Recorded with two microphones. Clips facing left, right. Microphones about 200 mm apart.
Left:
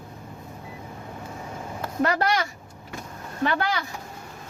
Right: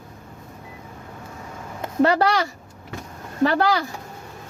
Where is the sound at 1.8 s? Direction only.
30° right (ahead or behind).